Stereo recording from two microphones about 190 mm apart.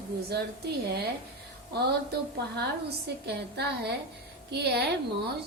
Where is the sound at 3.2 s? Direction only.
60° right (ahead or behind).